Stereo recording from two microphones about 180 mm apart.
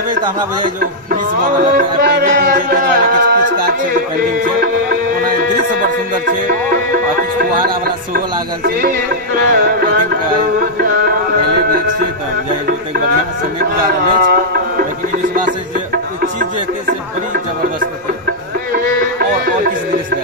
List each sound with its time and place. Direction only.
1.8 s music: 50° right (ahead or behind)
5.8 s music: 55° right (ahead or behind)
13.6 s music: 55° right (ahead or behind)
15.9 s music: 55° right (ahead or behind)
18.7 s music: 55° right (ahead or behind)